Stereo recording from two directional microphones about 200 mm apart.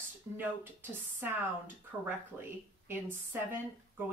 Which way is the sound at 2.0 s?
10° right (ahead or behind).